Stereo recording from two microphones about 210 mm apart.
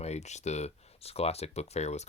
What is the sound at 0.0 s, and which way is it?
Speech, 30° left (ahead or behind).